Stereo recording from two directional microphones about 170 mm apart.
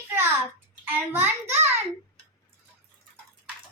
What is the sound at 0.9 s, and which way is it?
Speech, 10° right (ahead or behind).